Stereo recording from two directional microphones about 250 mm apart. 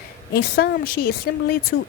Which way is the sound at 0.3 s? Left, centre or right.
Left.